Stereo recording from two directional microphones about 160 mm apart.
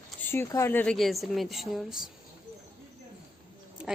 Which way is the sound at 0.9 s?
Centre (ahead or behind).